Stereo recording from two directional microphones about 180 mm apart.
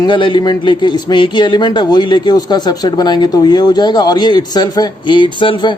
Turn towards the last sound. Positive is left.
turn(degrees=25)  # may be behind; listen again after turning